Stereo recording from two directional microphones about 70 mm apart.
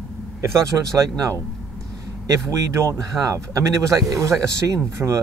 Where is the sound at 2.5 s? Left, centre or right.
Right.